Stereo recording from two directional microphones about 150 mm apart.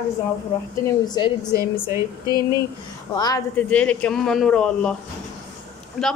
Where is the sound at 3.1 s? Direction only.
25° left (ahead or behind).